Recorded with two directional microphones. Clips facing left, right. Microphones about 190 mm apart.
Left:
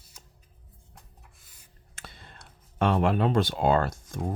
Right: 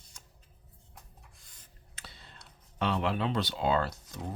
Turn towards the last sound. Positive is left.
turn(degrees=50)  # may be behind; listen again after turning